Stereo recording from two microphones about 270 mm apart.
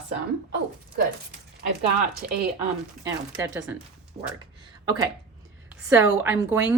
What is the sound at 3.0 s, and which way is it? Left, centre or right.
Speech, centre.